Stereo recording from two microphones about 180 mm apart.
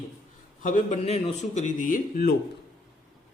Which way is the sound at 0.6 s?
45° left (ahead or behind).